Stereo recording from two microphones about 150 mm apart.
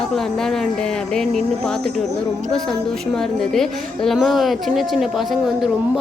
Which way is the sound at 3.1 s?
Centre (ahead or behind).